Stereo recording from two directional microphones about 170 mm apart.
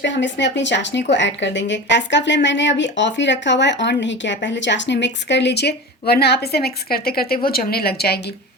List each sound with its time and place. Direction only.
0.0 s a woman's voice: 90° left; by 8.2 s 65° left (ahead or behind)